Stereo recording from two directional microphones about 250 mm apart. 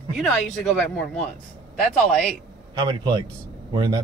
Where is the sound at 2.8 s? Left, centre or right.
Centre.